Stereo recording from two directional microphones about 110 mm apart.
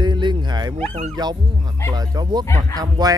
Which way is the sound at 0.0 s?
45° right (ahead or behind).